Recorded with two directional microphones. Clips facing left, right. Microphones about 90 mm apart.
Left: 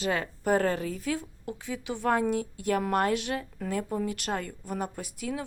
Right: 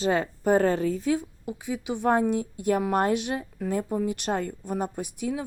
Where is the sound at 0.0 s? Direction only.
25° right (ahead or behind).